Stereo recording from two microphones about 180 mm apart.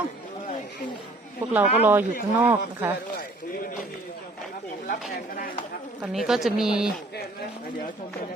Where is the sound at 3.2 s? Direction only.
50° left (ahead or behind).